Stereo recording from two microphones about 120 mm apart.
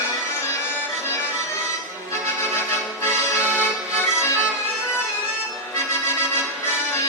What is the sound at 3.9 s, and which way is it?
Music, 20° left (ahead or behind).